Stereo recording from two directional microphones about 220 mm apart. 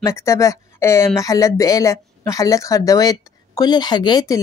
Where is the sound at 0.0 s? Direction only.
15° left (ahead or behind).